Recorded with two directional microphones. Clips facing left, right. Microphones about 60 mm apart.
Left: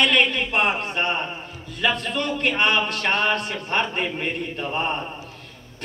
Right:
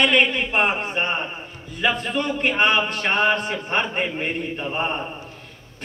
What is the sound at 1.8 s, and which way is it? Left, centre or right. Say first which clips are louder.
A man's voice: right 1 dB; centre.